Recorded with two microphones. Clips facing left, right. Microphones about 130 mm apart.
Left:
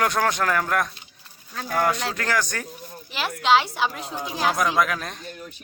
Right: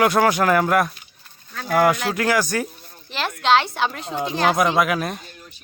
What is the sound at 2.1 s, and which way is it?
Speech, 10° right (ahead or behind).